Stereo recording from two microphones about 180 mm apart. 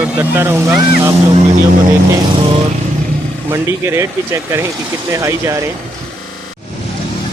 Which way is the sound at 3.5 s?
15° right (ahead or behind).